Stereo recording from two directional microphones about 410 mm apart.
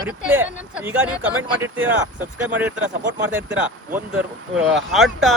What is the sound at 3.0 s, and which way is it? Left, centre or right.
Speech, right.